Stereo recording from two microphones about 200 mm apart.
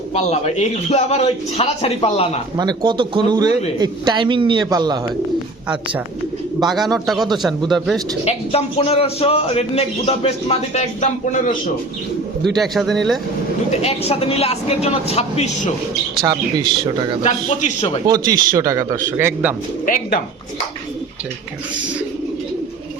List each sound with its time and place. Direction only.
0.1 s a man's voice: 35° left (ahead or behind)
2.6 s a man's voice: 20° right (ahead or behind)
6.6 s a man's voice: centre (ahead or behind)
8.2 s a man's voice: 30° left (ahead or behind)
12.5 s a man's voice: centre (ahead or behind)
13.7 s a man's voice: 30° left (ahead or behind)
16.2 s a man's voice: 20° right (ahead or behind)
17.2 s a man's voice: 35° left (ahead or behind)
18.5 s a man's voice: 15° right (ahead or behind)
19.8 s speech: 45° left (ahead or behind)